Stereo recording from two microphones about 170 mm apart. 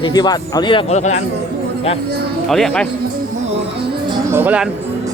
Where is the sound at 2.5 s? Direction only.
5° left (ahead or behind).